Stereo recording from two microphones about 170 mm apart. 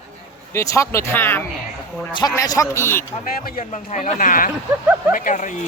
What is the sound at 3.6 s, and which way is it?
Speech, 45° left (ahead or behind).